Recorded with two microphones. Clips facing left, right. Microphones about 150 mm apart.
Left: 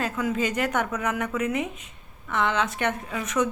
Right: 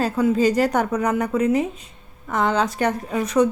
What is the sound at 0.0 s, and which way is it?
Speech, 35° right (ahead or behind).